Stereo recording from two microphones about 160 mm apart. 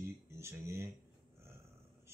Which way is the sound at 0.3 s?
15° right (ahead or behind).